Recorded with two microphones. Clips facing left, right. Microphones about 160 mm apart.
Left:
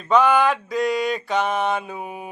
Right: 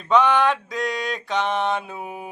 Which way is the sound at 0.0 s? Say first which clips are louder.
Left 1 dB; centre (ahead or behind).